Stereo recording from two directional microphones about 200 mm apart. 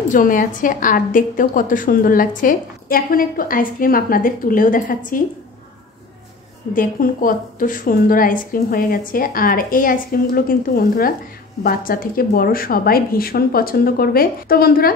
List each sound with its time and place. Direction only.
0.1 s a woman's voice: 40° left (ahead or behind)
6.7 s a woman's voice: 45° left (ahead or behind)